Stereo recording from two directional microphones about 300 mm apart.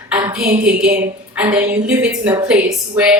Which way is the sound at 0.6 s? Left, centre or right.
Centre.